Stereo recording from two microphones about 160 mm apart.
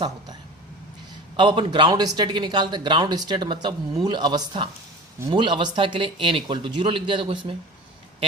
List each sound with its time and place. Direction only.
1.4 s speech: 30° right (ahead or behind)